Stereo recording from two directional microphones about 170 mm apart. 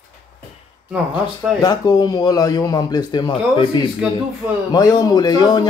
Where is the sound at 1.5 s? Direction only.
25° left (ahead or behind).